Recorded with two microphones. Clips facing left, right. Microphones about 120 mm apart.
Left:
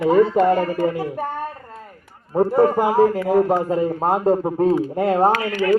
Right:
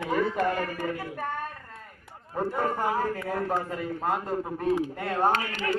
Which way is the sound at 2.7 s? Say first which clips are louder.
Left 11 dB; 90° left.